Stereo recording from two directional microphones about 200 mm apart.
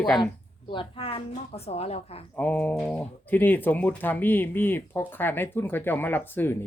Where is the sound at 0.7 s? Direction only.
25° left (ahead or behind).